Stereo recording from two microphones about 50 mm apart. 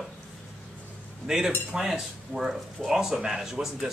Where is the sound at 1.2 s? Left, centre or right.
Centre.